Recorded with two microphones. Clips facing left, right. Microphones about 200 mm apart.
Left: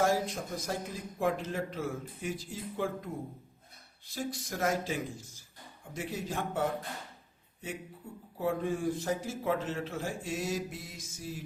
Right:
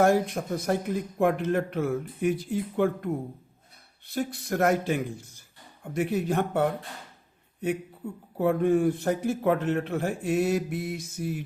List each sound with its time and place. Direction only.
0.0 s a man's voice: 60° right (ahead or behind)
8.4 s a man's voice: 60° right (ahead or behind)